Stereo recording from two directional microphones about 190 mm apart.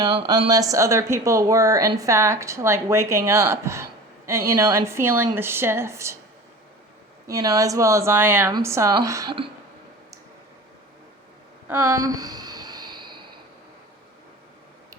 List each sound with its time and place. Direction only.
0.0 s speech: 20° right (ahead or behind)
7.3 s speech: 15° right (ahead or behind)
11.7 s a sound: 15° right (ahead or behind)